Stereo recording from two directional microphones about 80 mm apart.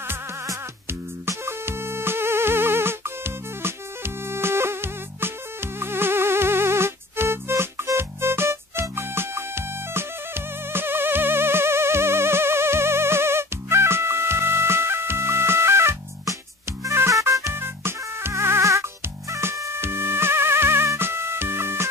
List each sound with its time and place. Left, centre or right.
0.8 s music: right